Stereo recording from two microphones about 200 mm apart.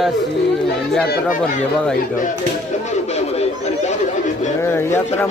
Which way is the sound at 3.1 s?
30° left (ahead or behind).